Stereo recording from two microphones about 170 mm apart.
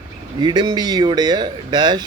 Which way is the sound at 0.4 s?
25° right (ahead or behind).